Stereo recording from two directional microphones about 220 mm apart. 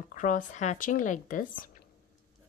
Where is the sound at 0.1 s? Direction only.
35° left (ahead or behind).